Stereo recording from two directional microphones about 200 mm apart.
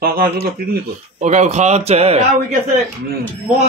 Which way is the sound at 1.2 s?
35° right (ahead or behind).